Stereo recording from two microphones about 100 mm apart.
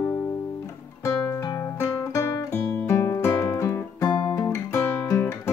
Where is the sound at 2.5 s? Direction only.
15° left (ahead or behind).